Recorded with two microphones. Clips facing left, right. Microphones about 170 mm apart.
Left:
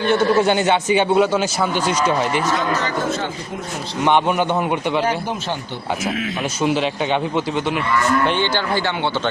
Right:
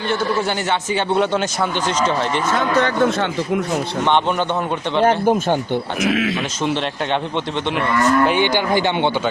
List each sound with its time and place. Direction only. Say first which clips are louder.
0.1 s a man's voice: left 5 dB; 20° left (ahead or behind)
1.1 s a man's voice: left 2 dB; 5° left (ahead or behind)
2.5 s speech: right 3 dB; 60° right (ahead or behind)
4.0 s a man's voice: left 3 dB; 10° left (ahead or behind)
5.0 s speech: right 7 dB; 50° right (ahead or behind)
6.0 s speech: right 7 dB; 85° right
6.6 s a man's voice: left 5 dB; 5° left (ahead or behind)
8.3 s speech: right 3 dB; 15° right (ahead or behind)